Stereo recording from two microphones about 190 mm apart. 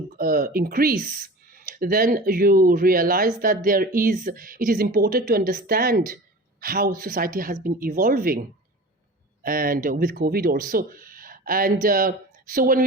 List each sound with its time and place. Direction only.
0.2 s speech: 50° right (ahead or behind)
9.4 s speech: 50° right (ahead or behind)